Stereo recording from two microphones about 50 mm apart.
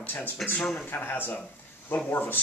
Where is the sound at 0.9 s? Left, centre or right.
Left.